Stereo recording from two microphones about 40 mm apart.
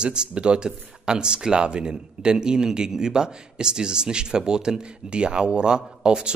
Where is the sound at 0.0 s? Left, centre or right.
Right.